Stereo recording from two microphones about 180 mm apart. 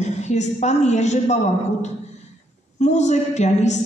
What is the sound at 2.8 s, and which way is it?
A man's voice, 40° left (ahead or behind).